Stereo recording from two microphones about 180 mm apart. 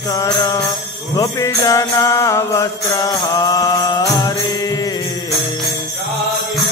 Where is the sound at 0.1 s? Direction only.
20° left (ahead or behind).